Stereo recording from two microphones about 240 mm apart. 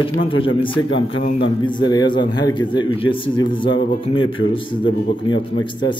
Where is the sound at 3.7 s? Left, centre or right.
Left.